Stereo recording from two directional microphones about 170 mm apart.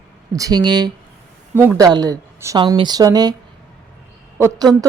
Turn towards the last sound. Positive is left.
turn(degrees=-20)  # may be behind; listen again after turning